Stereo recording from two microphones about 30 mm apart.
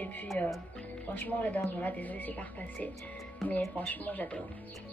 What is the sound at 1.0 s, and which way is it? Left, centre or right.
A woman's voice, left.